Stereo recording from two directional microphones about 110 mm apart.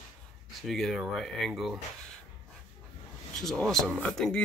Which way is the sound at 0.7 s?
Centre (ahead or behind).